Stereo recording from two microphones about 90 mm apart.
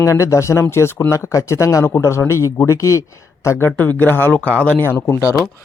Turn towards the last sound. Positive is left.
turn(degrees=30)  # may be behind; listen again after turning